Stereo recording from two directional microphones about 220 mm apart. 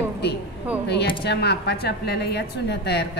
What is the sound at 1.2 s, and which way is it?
A woman's voice, 50° left (ahead or behind).